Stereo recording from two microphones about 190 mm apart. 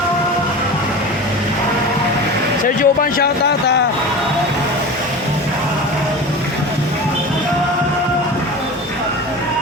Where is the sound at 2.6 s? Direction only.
45° left (ahead or behind); by 3.8 s 60° left (ahead or behind).